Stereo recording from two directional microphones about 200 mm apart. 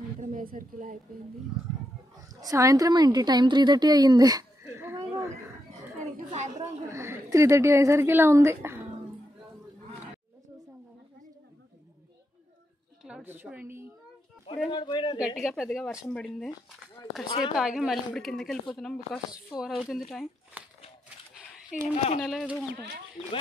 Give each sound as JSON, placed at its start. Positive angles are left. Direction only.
{"t": 0.2, "sound": "speech", "side_deg": -45}
{"t": 2.4, "sound": "a woman's voice", "side_deg": -15}
{"t": 6.3, "sound": "a woman's voice", "side_deg": -35}
{"t": 6.9, "sound": "a woman's voice", "side_deg": -15}
{"t": 13.0, "sound": "a woman's voice", "side_deg": -10}
{"t": 14.7, "sound": "speech", "side_deg": 20}
{"t": 15.1, "sound": "speech", "side_deg": -5}
{"t": 17.6, "sound": "speech", "side_deg": -5}
{"t": 21.9, "sound": "speech", "side_deg": 35}
{"t": 22.2, "sound": "speech", "side_deg": 0}